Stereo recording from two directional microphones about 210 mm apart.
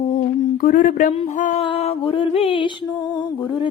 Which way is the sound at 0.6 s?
40° left (ahead or behind).